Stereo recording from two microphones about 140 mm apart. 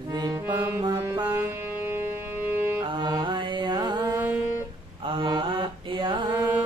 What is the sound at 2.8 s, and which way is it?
Music, 30° right (ahead or behind).